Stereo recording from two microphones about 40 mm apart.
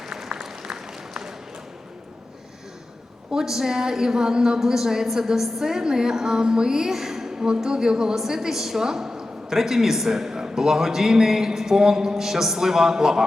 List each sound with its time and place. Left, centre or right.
0.0 s applause: centre
3.3 s a woman's voice: centre